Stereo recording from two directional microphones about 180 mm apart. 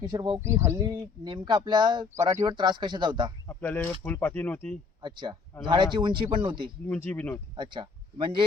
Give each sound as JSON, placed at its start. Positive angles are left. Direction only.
{"t": 0.0, "sound": "speech", "side_deg": -20}
{"t": 3.4, "sound": "a sound", "side_deg": 10}
{"t": 4.0, "sound": "speech", "side_deg": 10}
{"t": 5.0, "sound": "speech", "side_deg": -25}
{"t": 6.8, "sound": "speech", "side_deg": 10}
{"t": 7.5, "sound": "speech", "side_deg": -25}